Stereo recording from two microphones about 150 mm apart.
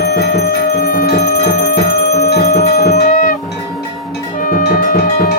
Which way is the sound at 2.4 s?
70° left (ahead or behind).